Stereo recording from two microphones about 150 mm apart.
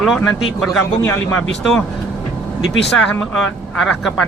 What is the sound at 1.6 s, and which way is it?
Speech, 5° left (ahead or behind).